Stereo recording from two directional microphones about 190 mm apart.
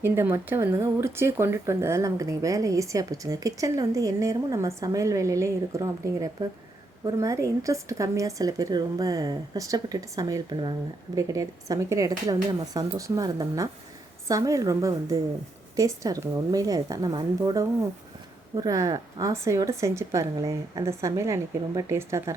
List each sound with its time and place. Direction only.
0.0 s a woman's voice: 10° right (ahead or behind)